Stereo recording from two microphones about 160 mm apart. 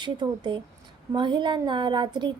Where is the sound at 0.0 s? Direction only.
30° right (ahead or behind).